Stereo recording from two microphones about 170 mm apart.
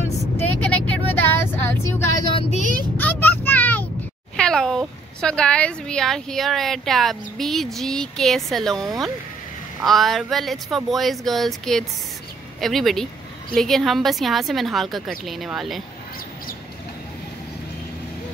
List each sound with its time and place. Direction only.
0.4 s vehicle: 10° left (ahead or behind)
2.3 s speech: 45° left (ahead or behind)
3.0 s vehicle: 10° left (ahead or behind)
4.4 s speech: 5° left (ahead or behind)
9.8 s speech: centre (ahead or behind)